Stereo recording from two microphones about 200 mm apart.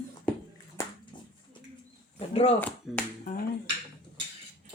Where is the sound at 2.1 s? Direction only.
25° left (ahead or behind).